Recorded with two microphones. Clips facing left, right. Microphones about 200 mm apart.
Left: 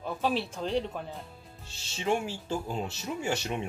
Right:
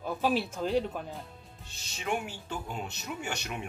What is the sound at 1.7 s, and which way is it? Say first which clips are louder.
Speech: left 4 dB; 30° left (ahead or behind).